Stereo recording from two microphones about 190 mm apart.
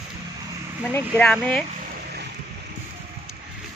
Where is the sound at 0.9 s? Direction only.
5° left (ahead or behind).